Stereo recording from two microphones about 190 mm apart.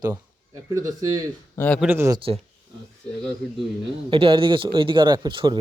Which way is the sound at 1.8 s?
10° right (ahead or behind).